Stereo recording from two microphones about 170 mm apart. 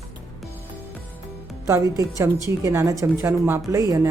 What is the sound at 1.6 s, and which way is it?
Speech, 20° right (ahead or behind).